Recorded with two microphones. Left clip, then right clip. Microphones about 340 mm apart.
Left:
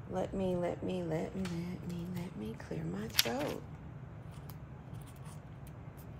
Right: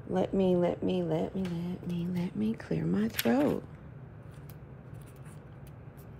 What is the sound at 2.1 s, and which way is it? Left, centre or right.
Speech, right.